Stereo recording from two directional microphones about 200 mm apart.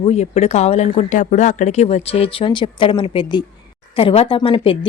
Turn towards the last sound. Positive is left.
turn(degrees=25)  # may be behind; listen again after turning